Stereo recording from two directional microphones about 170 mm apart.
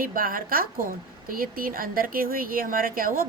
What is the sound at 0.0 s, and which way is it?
A woman's voice, 55° right (ahead or behind).